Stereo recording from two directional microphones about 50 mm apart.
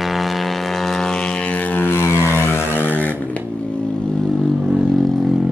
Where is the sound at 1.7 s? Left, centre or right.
Left.